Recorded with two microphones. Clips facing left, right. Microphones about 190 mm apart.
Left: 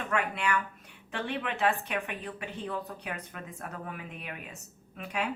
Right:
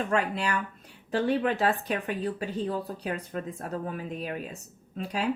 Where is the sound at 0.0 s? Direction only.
35° right (ahead or behind).